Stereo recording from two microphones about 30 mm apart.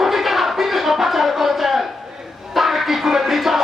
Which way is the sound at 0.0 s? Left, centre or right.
Centre.